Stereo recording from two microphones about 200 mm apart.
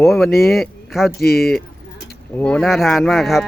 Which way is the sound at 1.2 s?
50° left (ahead or behind).